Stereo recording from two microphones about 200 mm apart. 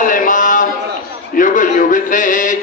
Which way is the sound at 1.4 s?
40° left (ahead or behind).